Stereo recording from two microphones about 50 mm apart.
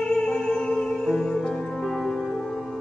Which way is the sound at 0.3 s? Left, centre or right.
Centre.